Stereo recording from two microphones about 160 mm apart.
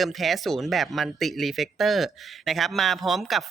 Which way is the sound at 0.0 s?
Centre (ahead or behind).